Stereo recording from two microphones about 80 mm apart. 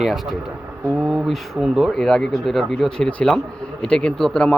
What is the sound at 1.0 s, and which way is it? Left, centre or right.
Speech, centre.